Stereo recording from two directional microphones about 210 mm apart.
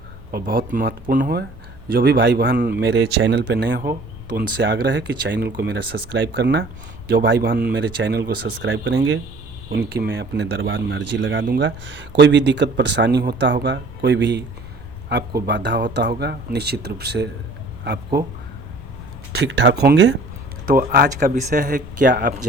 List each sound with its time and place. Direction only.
0.3 s speech: 45° right (ahead or behind); by 9.2 s 60° right (ahead or behind)
9.7 s speech: 50° right (ahead or behind)
19.3 s speech: 55° right (ahead or behind)